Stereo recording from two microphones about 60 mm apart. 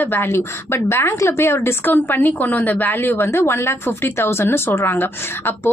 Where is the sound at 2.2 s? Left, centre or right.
Left.